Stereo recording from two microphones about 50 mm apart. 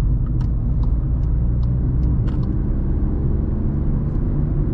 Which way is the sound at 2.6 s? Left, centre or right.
Centre.